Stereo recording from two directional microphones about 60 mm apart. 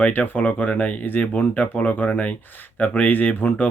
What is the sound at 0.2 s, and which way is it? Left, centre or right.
Speech, left.